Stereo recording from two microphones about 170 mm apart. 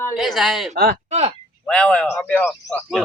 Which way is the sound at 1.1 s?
40° right (ahead or behind).